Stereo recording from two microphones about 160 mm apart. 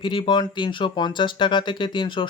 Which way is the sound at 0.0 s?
30° left (ahead or behind).